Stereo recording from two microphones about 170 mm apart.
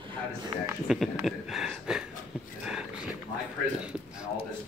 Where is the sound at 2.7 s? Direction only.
5° right (ahead or behind).